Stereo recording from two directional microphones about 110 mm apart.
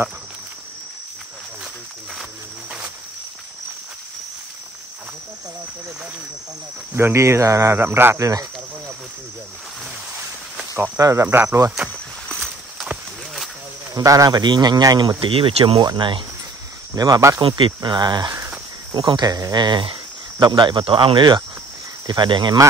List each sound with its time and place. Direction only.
6.9 s speech: 20° right (ahead or behind)
10.7 s speech: 30° right (ahead or behind)
12.4 s walk: centre (ahead or behind)
13.9 s speech: 30° right (ahead or behind); by 15.9 s 50° right (ahead or behind)
16.9 s speech: 35° right (ahead or behind)
17.4 s speech: 50° right (ahead or behind)